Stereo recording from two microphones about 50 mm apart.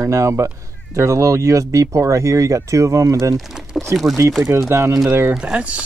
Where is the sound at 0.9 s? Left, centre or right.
Right.